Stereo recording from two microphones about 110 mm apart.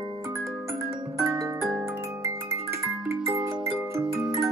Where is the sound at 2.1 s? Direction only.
25° right (ahead or behind).